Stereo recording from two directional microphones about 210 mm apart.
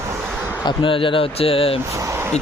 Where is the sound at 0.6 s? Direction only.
20° left (ahead or behind).